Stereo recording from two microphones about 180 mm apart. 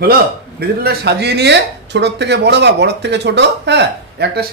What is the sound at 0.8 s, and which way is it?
Speech, 70° right (ahead or behind).